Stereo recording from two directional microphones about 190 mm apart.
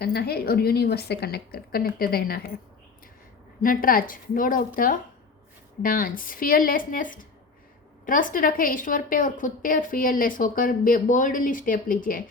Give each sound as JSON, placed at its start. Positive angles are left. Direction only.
{"t": 0.0, "sound": "a woman's voice", "side_deg": 55}
{"t": 3.6, "sound": "a woman's voice", "side_deg": 50}